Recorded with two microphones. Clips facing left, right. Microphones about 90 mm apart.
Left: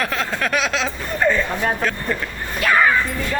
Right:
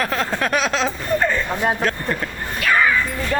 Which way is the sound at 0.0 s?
30° right (ahead or behind).